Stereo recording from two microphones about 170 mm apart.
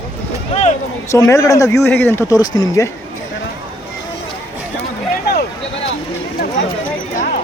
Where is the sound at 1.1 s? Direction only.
15° left (ahead or behind).